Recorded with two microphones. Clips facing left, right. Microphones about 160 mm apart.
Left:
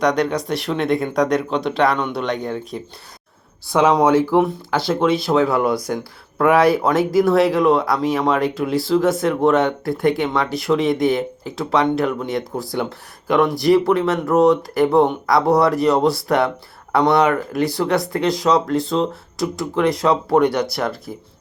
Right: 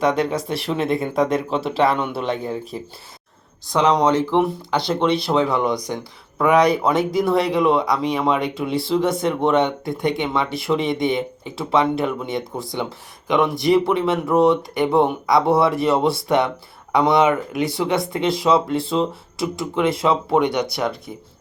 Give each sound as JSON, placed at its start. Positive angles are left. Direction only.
{"t": 0.0, "sound": "speech", "side_deg": 0}